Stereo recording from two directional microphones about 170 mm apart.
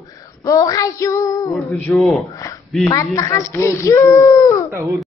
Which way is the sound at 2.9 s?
20° left (ahead or behind).